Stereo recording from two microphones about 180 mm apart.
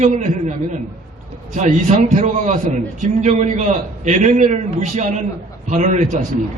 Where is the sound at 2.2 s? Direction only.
40° right (ahead or behind).